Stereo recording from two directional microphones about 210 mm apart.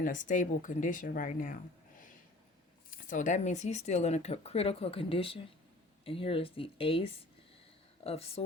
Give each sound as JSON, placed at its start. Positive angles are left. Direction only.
{"t": 0.0, "sound": "speech", "side_deg": 40}
{"t": 2.9, "sound": "speech", "side_deg": 35}